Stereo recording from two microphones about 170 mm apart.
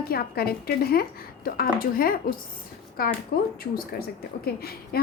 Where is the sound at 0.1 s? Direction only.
65° left (ahead or behind).